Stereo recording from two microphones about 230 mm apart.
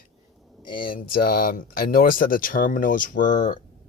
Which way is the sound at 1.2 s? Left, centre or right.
Left.